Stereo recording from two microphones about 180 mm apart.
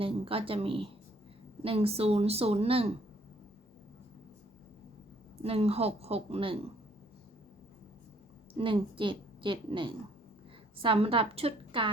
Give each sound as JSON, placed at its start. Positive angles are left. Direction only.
{"t": 0.0, "sound": "speech", "side_deg": -30}
{"t": 5.4, "sound": "speech", "side_deg": -35}
{"t": 8.5, "sound": "a woman's voice", "side_deg": -30}